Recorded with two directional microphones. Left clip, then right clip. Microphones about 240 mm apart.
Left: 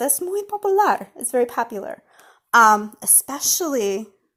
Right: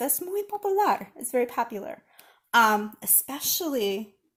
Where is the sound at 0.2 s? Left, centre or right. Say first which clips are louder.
Left 5 dB; left.